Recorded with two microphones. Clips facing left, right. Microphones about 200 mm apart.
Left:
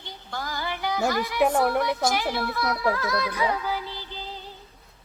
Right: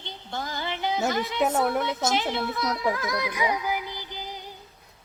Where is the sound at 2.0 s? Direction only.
20° right (ahead or behind).